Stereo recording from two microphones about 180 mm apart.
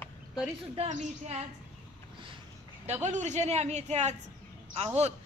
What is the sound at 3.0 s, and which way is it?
A woman's voice, 40° right (ahead or behind).